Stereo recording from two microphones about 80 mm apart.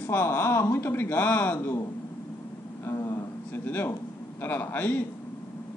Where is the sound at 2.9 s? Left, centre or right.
Left.